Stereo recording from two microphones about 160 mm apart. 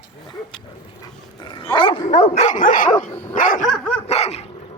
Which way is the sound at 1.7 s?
30° left (ahead or behind).